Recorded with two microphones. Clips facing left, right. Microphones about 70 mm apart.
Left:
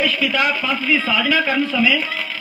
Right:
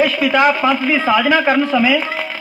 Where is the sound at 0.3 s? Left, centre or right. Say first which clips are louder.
Right 7 dB; right.